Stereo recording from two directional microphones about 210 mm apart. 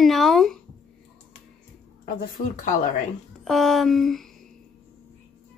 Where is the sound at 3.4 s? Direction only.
Centre (ahead or behind).